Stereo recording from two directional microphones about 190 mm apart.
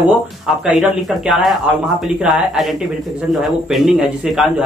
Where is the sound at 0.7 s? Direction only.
Centre (ahead or behind).